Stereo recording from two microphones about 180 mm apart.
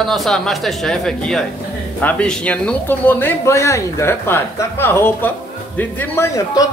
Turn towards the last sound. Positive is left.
turn(degrees=15)  # may be behind; listen again after turning